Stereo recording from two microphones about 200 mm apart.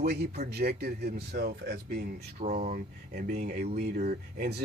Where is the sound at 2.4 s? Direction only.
35° right (ahead or behind).